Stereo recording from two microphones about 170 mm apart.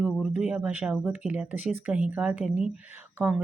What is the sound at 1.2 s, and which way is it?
Speech, 5° right (ahead or behind).